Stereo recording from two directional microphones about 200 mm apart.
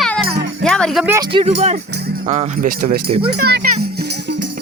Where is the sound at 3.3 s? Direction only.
55° right (ahead or behind).